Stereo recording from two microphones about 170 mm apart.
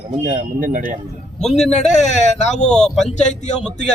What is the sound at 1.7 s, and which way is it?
Speech, 40° left (ahead or behind).